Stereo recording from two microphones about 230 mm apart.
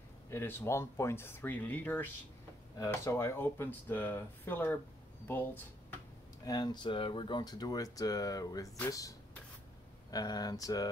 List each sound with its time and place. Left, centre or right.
0.3 s speech: centre
10.1 s speech: centre